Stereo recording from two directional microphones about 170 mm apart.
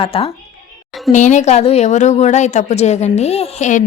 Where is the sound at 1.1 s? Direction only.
45° left (ahead or behind).